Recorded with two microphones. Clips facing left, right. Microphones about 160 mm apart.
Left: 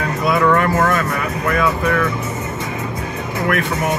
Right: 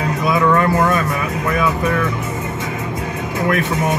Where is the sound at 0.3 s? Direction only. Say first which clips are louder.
Even; 15° right (ahead or behind).